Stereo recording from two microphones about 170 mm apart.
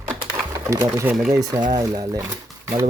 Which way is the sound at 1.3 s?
20° right (ahead or behind).